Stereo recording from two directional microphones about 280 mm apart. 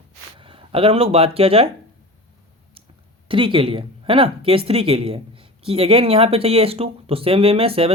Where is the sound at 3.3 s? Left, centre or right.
Centre.